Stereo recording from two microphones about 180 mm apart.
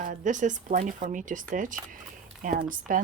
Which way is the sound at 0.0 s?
45° right (ahead or behind).